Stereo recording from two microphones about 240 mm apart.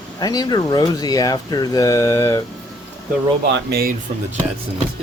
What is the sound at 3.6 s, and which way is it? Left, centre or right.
Speech, right.